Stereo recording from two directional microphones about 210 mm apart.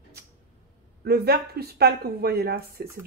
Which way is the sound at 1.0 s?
50° right (ahead or behind).